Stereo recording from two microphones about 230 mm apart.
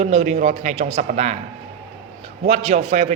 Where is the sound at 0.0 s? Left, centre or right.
Right.